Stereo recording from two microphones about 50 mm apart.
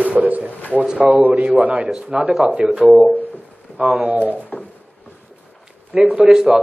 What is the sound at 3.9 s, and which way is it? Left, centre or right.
Speech, right.